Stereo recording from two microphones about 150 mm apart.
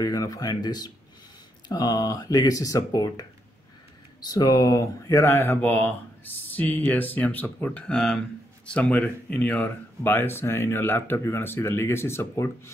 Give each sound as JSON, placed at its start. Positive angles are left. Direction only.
{"t": 0.0, "sound": "speech", "side_deg": 20}